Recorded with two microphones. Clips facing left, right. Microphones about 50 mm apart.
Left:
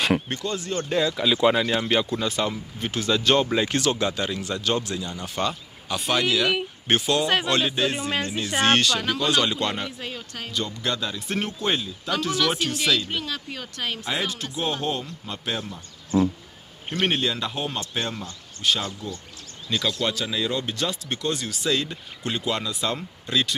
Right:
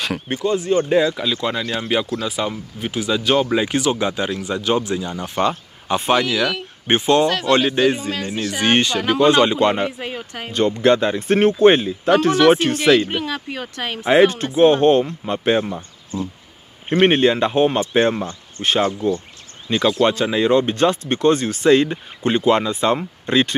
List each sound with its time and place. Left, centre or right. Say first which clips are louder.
0.3 s speech: right 10 dB; centre
1.3 s speech: left 2 dB; centre
1.8 s speech: right 2 dB; centre; by 10.5 s right
10.5 s speech: right 13 dB; right
13.1 s speech: right 6 dB; right
16.9 s speech: right 10 dB; right